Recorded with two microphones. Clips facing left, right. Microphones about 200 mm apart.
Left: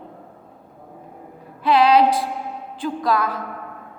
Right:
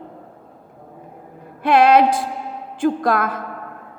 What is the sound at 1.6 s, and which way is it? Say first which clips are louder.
Music: right 2 dB; 50° right (ahead or behind).